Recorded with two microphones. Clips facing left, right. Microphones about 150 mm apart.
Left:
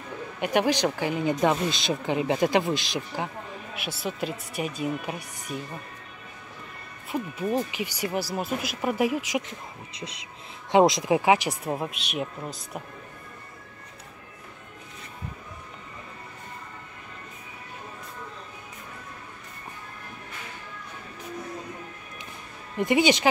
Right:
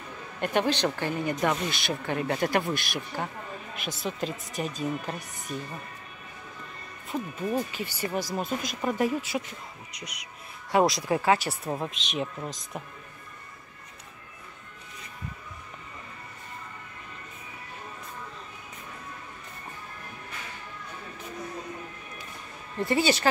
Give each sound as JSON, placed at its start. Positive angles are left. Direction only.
{"t": 0.4, "sound": "speech", "side_deg": 10}
{"t": 3.7, "sound": "speech", "side_deg": 5}
{"t": 7.1, "sound": "speech", "side_deg": 10}
{"t": 9.9, "sound": "speech", "side_deg": 25}
{"t": 22.8, "sound": "speech", "side_deg": 15}